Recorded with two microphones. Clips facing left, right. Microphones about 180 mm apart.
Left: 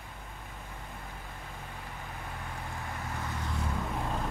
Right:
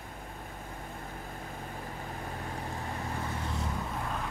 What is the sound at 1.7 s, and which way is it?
Vehicle, 40° right (ahead or behind).